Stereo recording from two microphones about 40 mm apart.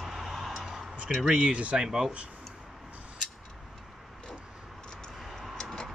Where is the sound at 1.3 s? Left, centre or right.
Right.